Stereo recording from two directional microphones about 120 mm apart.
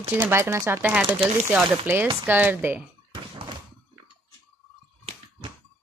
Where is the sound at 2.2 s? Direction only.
15° right (ahead or behind).